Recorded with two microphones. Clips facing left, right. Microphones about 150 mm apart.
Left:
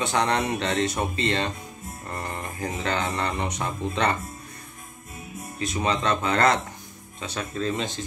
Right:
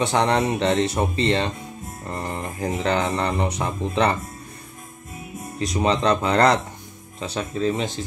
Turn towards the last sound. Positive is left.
turn(degrees=-30)  # may be behind; listen again after turning